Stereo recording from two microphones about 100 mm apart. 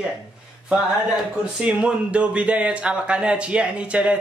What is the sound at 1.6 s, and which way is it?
Speech, 10° right (ahead or behind).